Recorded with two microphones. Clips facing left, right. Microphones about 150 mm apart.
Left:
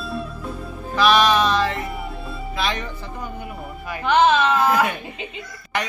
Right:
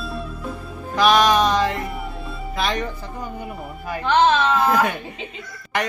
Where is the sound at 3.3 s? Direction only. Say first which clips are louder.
Right 1 dB; centre (ahead or behind).